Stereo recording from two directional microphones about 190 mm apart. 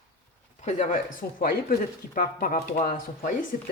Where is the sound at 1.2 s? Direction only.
50° left (ahead or behind).